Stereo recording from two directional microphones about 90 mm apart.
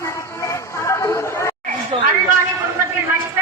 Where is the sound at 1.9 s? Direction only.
65° right (ahead or behind).